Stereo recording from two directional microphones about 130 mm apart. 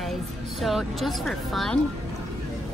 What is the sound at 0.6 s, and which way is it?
Speech, centre (ahead or behind).